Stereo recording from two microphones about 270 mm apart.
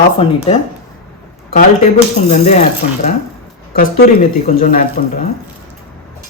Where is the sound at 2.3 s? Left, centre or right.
Left.